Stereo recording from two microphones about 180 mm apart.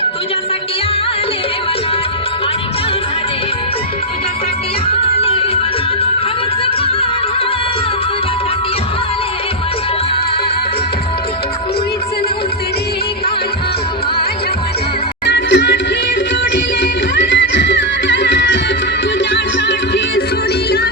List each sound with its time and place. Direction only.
4.9 s music: 30° left (ahead or behind)
15.3 s music: 75° left (ahead or behind)